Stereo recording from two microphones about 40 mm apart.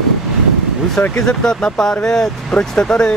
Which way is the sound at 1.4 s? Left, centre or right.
Centre.